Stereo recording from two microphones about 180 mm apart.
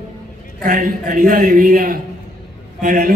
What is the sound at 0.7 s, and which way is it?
A man's voice, 50° right (ahead or behind).